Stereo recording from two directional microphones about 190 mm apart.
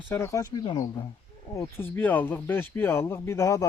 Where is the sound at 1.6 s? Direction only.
10° left (ahead or behind).